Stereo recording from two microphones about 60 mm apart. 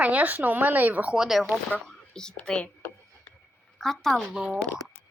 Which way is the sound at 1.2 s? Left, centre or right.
Centre.